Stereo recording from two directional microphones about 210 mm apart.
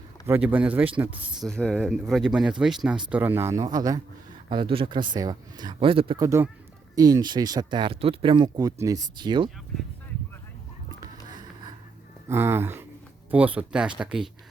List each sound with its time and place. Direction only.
0.3 s a man's voice: 10° right (ahead or behind)
12.3 s a man's voice: 10° right (ahead or behind)